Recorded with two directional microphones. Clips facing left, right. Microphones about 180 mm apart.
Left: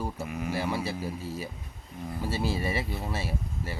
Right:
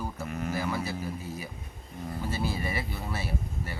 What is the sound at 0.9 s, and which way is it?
Speech, 30° left (ahead or behind).